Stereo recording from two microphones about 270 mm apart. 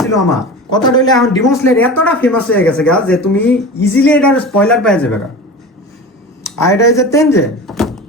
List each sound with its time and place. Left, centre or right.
0.3 s speech: centre
6.4 s speech: centre